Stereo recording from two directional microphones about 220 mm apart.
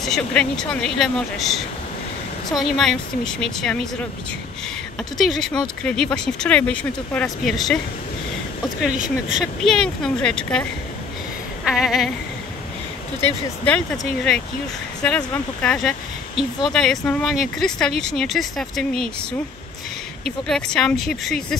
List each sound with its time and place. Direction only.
0.0 s speech: 5° left (ahead or behind)
5.1 s speech: centre (ahead or behind)
9.3 s speech: centre (ahead or behind)
11.6 s speech: centre (ahead or behind)
13.7 s speech: 5° left (ahead or behind)
15.0 s speech: 5° left (ahead or behind)
20.4 s speech: 5° left (ahead or behind)